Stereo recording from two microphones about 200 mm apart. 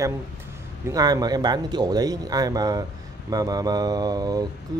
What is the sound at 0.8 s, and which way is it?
Speech, 20° right (ahead or behind).